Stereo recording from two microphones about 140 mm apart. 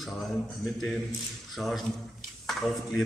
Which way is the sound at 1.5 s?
Centre (ahead or behind).